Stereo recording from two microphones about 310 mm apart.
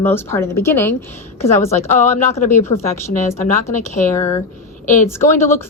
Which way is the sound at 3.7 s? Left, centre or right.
Left.